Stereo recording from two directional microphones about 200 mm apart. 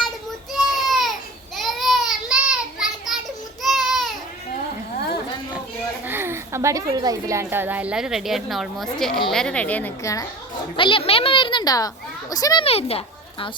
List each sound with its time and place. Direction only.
0.5 s baby cry: centre (ahead or behind)
1.5 s a sound: centre (ahead or behind)
3.6 s baby cry: centre (ahead or behind)
6.1 s a woman's voice: 10° right (ahead or behind); by 12.6 s 20° left (ahead or behind)
12.6 s speech: 30° left (ahead or behind)